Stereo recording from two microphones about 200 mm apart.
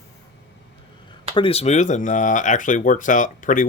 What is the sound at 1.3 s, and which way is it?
Speech, 30° left (ahead or behind).